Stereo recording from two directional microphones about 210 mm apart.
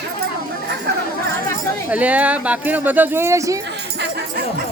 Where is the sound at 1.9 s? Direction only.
5° right (ahead or behind).